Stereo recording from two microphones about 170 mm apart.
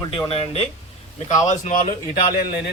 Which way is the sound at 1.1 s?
45° left (ahead or behind).